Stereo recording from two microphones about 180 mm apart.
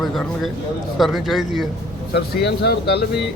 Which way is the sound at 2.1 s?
65° left (ahead or behind).